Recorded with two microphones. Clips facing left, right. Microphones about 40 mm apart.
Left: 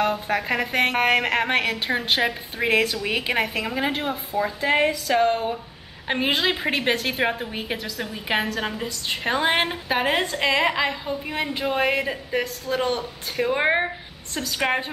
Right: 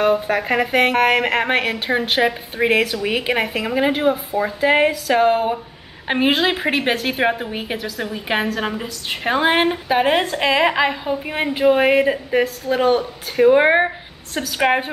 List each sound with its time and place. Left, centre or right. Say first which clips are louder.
0.0 s a woman's voice: right 5 dB; centre